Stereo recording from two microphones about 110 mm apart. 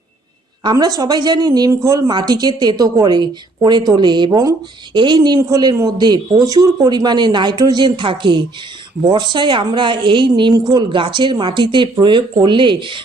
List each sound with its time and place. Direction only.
0.6 s a woman's voice: 35° right (ahead or behind)